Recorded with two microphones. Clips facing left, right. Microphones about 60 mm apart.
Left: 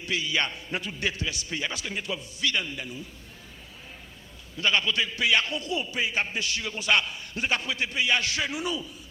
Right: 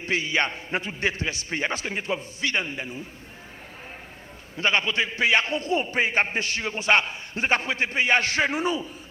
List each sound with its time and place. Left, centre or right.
0.0 s a man's voice: right
4.5 s a man's voice: right